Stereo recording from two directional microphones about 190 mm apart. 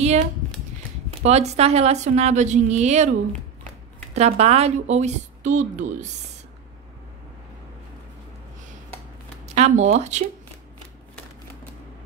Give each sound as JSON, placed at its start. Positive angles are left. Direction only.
{"t": 1.1, "sound": "a woman's voice", "side_deg": -35}
{"t": 9.6, "sound": "a woman's voice", "side_deg": -35}